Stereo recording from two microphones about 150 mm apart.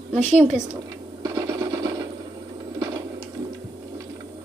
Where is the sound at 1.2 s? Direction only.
25° right (ahead or behind).